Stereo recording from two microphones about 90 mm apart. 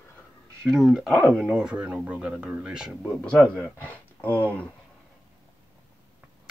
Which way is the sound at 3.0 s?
10° left (ahead or behind).